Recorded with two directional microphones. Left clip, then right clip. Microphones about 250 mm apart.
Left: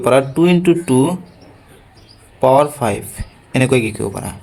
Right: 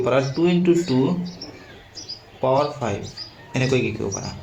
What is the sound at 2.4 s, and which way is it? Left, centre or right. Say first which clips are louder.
Speech: left 8 dB; left.